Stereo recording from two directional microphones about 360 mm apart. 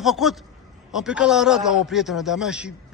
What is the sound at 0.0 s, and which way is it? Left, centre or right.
A man's voice, centre.